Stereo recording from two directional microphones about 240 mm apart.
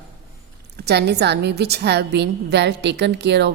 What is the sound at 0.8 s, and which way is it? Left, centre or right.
A woman's voice, right.